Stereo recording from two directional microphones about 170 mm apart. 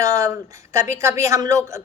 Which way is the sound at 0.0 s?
20° right (ahead or behind).